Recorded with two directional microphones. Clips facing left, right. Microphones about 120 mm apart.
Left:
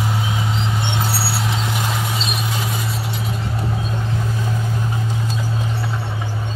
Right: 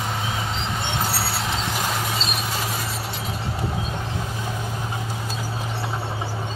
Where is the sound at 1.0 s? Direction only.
Centre (ahead or behind).